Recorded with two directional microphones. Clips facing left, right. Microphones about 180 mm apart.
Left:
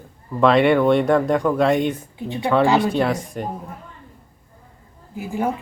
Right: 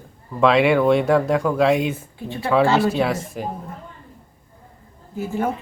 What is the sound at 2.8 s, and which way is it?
Speech, centre (ahead or behind).